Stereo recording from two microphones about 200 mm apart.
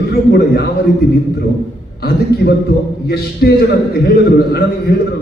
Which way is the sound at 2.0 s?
50° left (ahead or behind).